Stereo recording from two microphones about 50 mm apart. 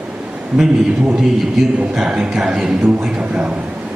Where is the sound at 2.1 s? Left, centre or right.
Centre.